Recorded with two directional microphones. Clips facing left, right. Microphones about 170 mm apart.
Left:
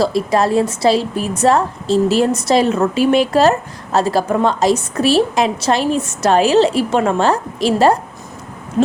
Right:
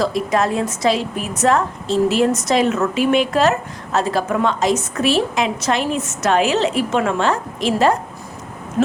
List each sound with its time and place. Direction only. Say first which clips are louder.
0.0 s a woman's voice: left 3 dB; 35° left (ahead or behind)